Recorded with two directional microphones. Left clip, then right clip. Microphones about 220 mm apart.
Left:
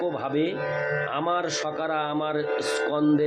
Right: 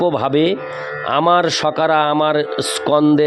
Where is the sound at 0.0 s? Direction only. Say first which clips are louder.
Right 11 dB; 50° right (ahead or behind).